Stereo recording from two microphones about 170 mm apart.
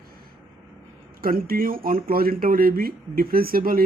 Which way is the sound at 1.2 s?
60° right (ahead or behind).